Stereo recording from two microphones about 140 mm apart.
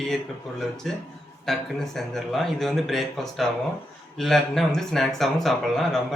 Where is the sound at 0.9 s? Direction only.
Centre (ahead or behind).